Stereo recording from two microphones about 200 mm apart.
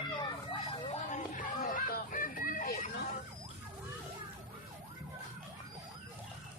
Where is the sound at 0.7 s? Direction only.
40° left (ahead or behind).